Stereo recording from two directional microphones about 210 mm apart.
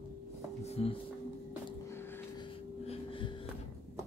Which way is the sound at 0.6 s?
30° left (ahead or behind).